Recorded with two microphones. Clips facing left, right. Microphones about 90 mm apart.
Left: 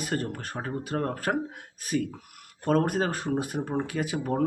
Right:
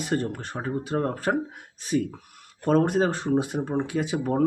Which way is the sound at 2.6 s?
25° right (ahead or behind).